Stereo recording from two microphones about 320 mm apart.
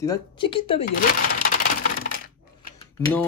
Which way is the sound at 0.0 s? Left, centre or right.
Centre.